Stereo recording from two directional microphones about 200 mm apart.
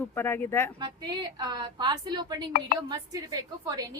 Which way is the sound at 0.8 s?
20° right (ahead or behind).